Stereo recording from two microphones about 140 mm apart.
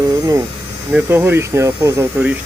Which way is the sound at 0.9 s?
15° right (ahead or behind).